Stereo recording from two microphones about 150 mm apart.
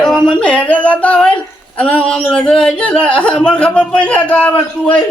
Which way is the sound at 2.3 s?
5° left (ahead or behind).